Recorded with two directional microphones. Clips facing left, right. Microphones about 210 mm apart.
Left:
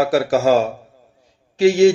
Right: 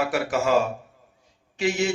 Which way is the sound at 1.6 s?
35° left (ahead or behind).